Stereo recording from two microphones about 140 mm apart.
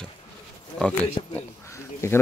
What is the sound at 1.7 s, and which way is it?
Crow, 20° left (ahead or behind).